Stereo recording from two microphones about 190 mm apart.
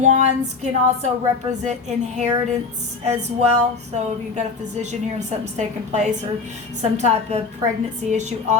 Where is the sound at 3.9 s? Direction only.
35° right (ahead or behind).